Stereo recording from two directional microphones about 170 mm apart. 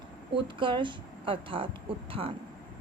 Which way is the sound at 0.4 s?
30° right (ahead or behind).